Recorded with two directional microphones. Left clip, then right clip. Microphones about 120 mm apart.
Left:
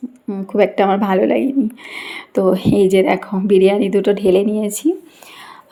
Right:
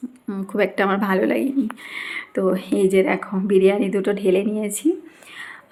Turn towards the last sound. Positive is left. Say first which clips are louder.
# left 5 dB
turn(degrees=25)  # may be behind; listen again after turning